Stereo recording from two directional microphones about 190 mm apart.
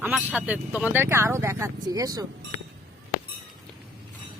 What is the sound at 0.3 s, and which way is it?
Speech, 5° right (ahead or behind).